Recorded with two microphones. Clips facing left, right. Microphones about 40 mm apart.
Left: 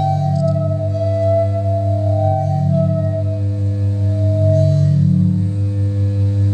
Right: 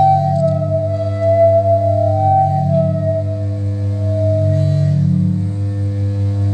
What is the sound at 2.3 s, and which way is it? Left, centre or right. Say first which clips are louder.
Music: right 5 dB; right.